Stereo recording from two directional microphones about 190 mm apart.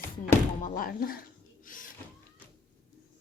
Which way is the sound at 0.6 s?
50° left (ahead or behind).